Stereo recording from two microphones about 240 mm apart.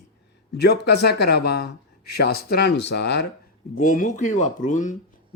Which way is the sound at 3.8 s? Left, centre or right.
Left.